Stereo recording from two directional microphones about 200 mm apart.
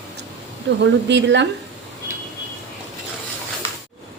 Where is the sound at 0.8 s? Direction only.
60° right (ahead or behind).